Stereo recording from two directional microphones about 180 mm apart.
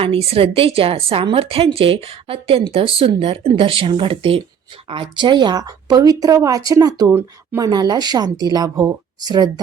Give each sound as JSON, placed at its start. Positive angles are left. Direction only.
{"t": 0.0, "sound": "a woman's voice", "side_deg": -35}